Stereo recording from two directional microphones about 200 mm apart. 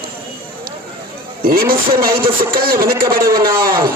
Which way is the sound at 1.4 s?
45° right (ahead or behind).